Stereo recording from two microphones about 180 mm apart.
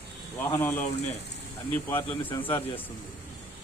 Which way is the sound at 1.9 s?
10° left (ahead or behind).